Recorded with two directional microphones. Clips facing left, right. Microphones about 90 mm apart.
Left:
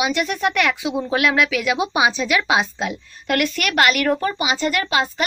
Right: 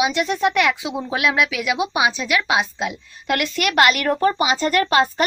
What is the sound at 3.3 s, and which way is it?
A woman's voice, 20° right (ahead or behind).